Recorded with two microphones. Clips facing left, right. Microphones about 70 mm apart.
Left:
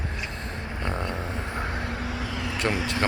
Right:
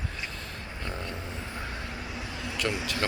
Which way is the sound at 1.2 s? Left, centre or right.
Left.